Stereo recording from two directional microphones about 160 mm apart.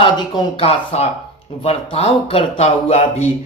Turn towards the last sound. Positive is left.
turn(degrees=45)  # may be behind; listen again after turning